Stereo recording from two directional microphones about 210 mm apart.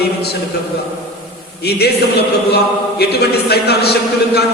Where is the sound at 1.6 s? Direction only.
50° left (ahead or behind).